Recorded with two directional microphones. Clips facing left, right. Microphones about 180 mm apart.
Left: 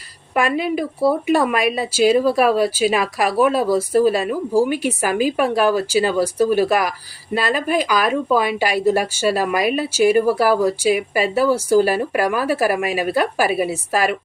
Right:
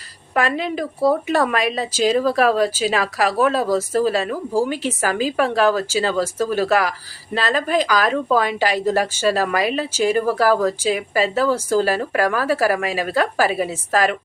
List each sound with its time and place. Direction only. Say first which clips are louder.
0.3 s speech: left 2 dB; 10° left (ahead or behind)